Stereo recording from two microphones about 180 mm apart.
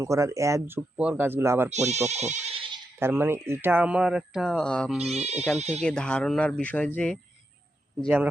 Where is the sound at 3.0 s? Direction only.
15° right (ahead or behind); by 4.9 s 5° left (ahead or behind).